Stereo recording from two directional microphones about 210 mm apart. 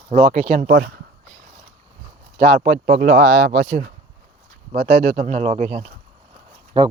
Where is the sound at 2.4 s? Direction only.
35° right (ahead or behind).